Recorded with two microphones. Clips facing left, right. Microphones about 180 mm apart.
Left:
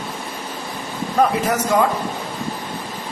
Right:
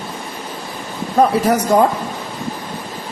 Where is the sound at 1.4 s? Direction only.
35° right (ahead or behind).